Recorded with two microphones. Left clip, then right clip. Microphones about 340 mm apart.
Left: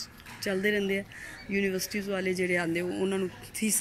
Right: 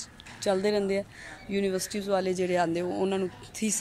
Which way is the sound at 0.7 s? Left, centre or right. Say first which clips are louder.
Right 2 dB; right.